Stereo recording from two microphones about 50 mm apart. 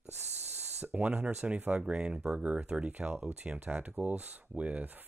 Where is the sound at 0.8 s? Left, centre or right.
Right.